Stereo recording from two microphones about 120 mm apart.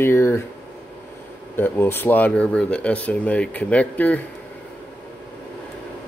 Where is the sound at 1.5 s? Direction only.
15° left (ahead or behind).